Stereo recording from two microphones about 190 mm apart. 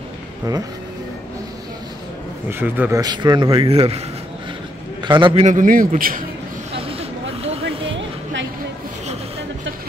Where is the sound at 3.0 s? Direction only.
20° right (ahead or behind).